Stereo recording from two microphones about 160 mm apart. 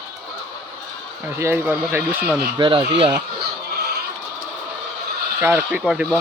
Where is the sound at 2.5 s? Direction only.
30° right (ahead or behind).